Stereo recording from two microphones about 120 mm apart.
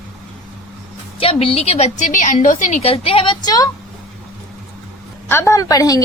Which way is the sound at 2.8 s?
55° left (ahead or behind).